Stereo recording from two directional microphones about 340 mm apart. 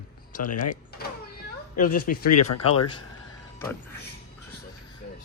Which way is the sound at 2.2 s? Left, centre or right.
Left.